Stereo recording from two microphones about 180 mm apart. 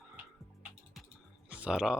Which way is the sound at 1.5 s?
5° right (ahead or behind).